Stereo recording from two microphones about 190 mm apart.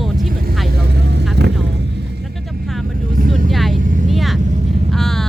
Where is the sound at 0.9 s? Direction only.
60° right (ahead or behind).